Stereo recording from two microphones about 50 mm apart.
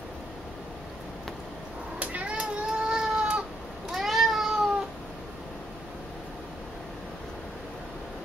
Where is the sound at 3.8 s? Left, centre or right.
Centre.